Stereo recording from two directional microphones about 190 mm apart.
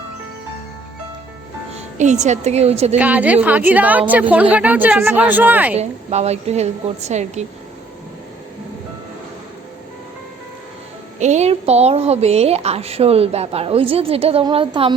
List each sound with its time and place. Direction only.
2.0 s a woman's voice: 40° right (ahead or behind)
3.0 s a woman's voice: 10° right (ahead or behind)
5.7 s a woman's voice: 35° right (ahead or behind)
11.2 s a woman's voice: 35° right (ahead or behind)